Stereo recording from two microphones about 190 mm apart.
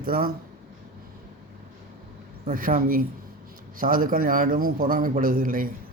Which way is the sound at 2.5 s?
45° right (ahead or behind).